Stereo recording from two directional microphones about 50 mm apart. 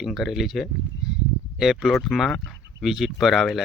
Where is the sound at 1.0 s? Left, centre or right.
Centre.